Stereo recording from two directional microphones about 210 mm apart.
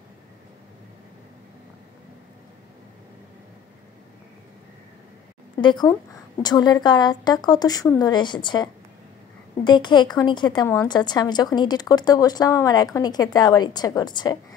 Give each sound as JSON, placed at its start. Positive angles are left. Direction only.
{"t": 5.6, "sound": "a woman's voice", "side_deg": 20}
{"t": 9.7, "sound": "a woman's voice", "side_deg": 20}